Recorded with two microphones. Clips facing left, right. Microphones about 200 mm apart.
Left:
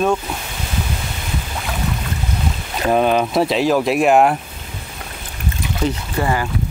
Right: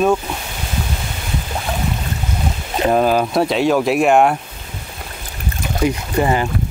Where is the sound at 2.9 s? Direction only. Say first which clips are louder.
Even; centre (ahead or behind).